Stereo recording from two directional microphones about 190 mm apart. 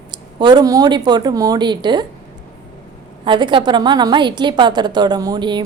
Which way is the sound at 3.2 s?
25° right (ahead or behind).